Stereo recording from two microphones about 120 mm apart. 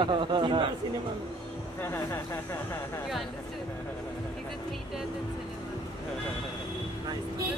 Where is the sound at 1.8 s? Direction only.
20° left (ahead or behind).